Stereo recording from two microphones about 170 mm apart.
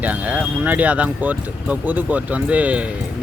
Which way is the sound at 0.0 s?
10° right (ahead or behind).